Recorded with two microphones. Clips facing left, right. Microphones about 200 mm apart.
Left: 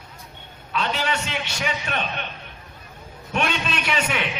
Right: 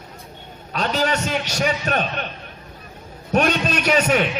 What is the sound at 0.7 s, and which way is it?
A man's voice, 40° right (ahead or behind).